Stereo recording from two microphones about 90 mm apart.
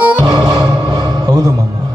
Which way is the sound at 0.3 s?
45° right (ahead or behind).